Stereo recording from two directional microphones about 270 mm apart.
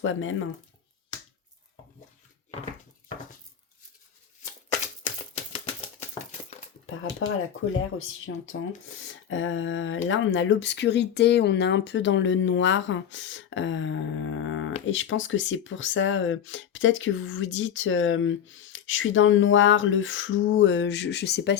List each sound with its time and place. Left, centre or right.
0.0 s speech: left
5.0 s typewriter: left
6.8 s speech: left
9.3 s speech: left